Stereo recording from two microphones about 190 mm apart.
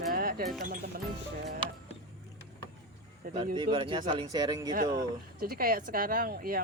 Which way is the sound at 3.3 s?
25° right (ahead or behind).